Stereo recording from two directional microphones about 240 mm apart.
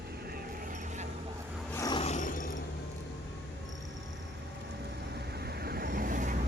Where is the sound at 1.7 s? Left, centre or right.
Centre; by 2.5 s left.